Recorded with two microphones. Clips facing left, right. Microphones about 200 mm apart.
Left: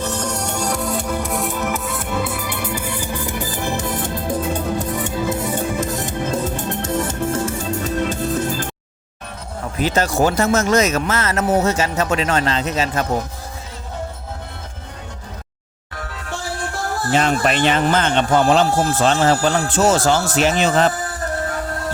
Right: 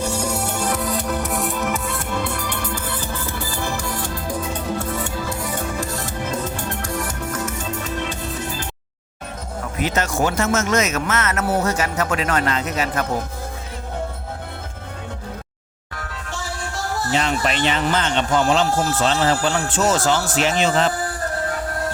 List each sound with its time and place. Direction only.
0.0 s music: 10° right (ahead or behind); by 8.6 s 45° left (ahead or behind)
9.7 s speech: 30° left (ahead or behind)
17.1 s a man's voice: 50° left (ahead or behind)